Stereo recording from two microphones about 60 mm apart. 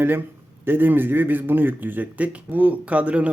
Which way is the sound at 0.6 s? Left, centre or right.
Right.